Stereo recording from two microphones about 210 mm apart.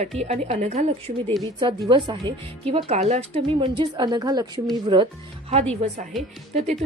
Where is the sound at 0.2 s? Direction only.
30° right (ahead or behind).